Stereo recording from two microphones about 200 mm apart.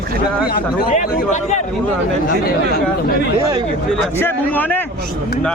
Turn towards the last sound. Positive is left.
turn(degrees=10)  # may be behind; listen again after turning